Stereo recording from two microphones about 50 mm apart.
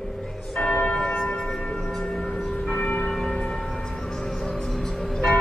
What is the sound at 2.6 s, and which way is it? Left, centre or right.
Church bell, left.